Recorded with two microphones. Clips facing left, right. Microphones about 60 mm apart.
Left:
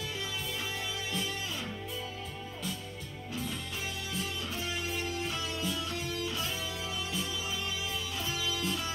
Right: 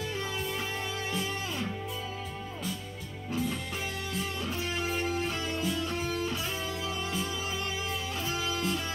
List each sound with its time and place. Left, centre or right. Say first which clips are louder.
4.9 s music: right 4 dB; right
8.3 s music: right 3 dB; right